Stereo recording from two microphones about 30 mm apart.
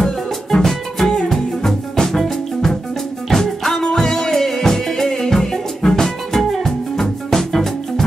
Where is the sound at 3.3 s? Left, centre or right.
Centre.